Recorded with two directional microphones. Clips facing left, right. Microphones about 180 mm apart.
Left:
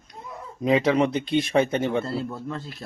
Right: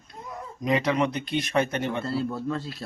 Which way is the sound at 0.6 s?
30° left (ahead or behind).